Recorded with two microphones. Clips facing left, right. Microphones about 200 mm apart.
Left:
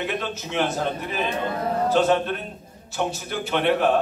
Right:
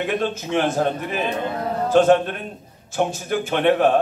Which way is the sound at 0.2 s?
50° right (ahead or behind).